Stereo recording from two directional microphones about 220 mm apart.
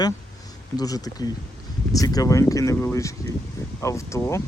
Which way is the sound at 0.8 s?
15° left (ahead or behind).